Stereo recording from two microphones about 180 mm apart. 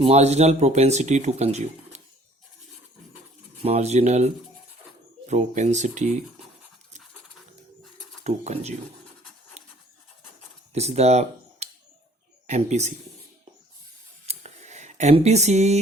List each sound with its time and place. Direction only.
0.0 s speech: 35° right (ahead or behind)
3.6 s speech: 35° right (ahead or behind)
8.2 s speech: 40° right (ahead or behind)
9.6 s a sound: 35° right (ahead or behind)
10.7 s speech: 35° right (ahead or behind)
14.3 s a sound: 40° right (ahead or behind)